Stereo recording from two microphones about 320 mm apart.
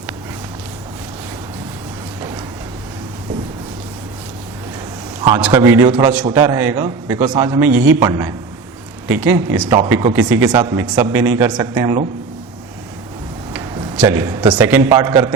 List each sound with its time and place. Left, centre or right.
5.2 s a man's voice: centre
13.5 s a man's voice: centre